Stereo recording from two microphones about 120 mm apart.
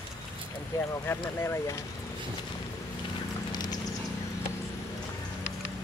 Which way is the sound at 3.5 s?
35° left (ahead or behind).